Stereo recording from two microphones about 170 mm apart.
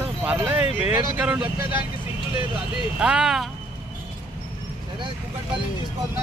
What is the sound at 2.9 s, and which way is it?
Speech, 5° right (ahead or behind).